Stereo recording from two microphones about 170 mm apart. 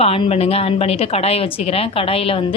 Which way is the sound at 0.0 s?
35° left (ahead or behind).